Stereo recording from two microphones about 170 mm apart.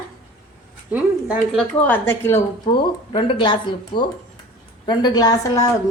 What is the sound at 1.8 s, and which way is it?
Speech, 10° left (ahead or behind).